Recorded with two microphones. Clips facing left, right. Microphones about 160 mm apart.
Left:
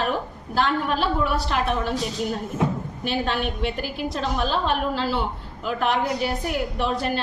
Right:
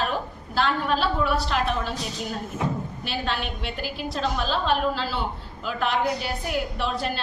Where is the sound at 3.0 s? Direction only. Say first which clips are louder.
Left 5 dB; 45° left (ahead or behind).